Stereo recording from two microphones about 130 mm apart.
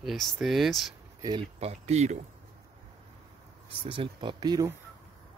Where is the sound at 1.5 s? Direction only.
55° right (ahead or behind).